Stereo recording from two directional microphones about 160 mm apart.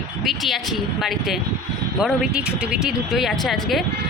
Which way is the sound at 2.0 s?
5° right (ahead or behind).